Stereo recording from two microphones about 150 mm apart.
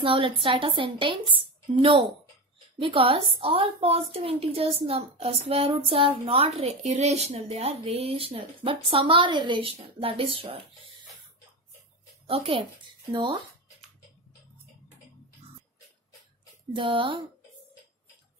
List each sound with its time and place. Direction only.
0.0 s a woman's voice: 35° right (ahead or behind)
12.3 s speech: 35° right (ahead or behind)
16.7 s a woman's voice: 35° right (ahead or behind)